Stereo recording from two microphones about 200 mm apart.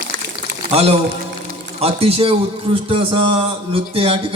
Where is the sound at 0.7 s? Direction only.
30° right (ahead or behind).